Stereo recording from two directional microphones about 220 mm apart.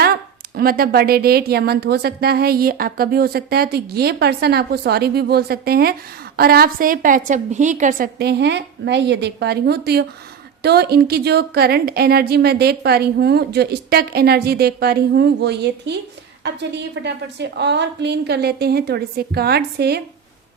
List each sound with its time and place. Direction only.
0.5 s a woman's voice: 45° right (ahead or behind)